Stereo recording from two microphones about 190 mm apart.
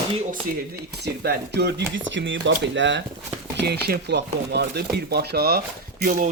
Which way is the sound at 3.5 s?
60° right (ahead or behind).